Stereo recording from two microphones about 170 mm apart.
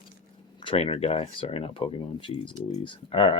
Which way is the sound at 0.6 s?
30° left (ahead or behind).